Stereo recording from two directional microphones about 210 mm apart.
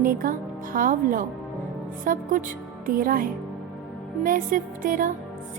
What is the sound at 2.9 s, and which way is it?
Speech, 40° right (ahead or behind).